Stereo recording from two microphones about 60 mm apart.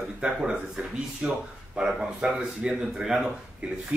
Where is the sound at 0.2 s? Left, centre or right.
Centre.